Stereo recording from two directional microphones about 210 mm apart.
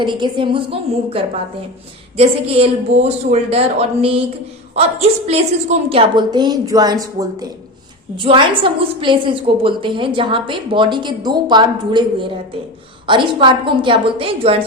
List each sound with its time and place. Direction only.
0.0 s a woman's voice: 20° right (ahead or behind)
13.1 s a woman's voice: 25° right (ahead or behind)